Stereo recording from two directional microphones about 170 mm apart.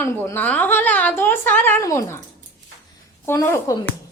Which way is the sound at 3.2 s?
15° left (ahead or behind).